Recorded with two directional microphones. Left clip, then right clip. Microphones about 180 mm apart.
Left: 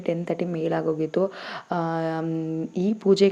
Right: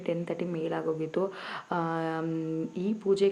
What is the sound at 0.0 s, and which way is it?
Speech, 25° left (ahead or behind).